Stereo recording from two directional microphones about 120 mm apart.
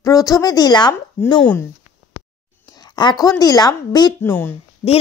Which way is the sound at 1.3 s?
15° left (ahead or behind).